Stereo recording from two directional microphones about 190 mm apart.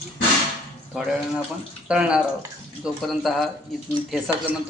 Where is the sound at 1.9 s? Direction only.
5° right (ahead or behind).